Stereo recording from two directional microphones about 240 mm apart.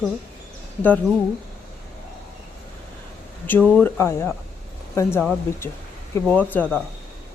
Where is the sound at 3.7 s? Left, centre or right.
Centre.